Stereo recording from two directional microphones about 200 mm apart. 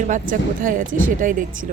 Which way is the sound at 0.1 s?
40° right (ahead or behind).